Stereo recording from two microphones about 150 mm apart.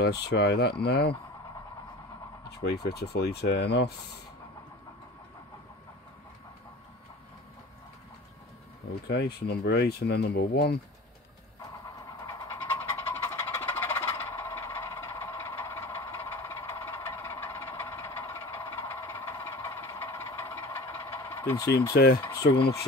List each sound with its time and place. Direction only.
0.0 s speech: 90° left
2.6 s speech: 90° left
9.5 s speech: 90° left
12.1 s a sound: 25° left (ahead or behind)
21.9 s speech: 90° left